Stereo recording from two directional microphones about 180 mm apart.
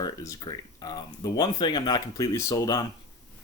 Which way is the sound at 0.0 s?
20° left (ahead or behind).